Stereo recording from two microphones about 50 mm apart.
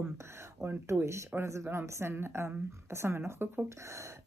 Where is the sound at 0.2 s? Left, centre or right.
Right.